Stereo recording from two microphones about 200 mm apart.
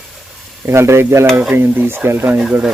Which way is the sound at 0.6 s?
10° right (ahead or behind).